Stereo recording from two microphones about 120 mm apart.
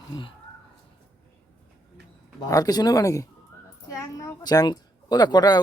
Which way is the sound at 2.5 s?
30° left (ahead or behind).